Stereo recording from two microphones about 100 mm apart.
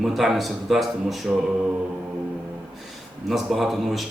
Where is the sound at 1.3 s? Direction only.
15° right (ahead or behind).